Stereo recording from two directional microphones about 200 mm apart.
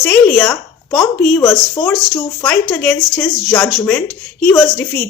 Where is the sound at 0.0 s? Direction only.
5° left (ahead or behind).